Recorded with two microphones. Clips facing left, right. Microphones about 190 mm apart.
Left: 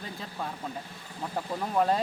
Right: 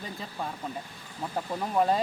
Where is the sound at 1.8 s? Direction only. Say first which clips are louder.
Right 1 dB; 5° right (ahead or behind).